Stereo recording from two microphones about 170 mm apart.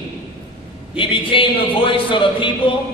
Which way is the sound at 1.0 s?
30° left (ahead or behind).